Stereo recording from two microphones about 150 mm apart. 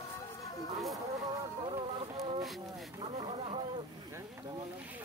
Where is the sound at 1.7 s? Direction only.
30° right (ahead or behind).